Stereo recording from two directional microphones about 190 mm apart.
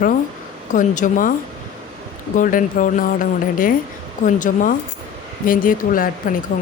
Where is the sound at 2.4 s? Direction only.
45° left (ahead or behind).